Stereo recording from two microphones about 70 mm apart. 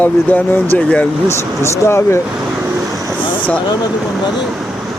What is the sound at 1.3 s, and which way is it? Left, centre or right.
Speech, left.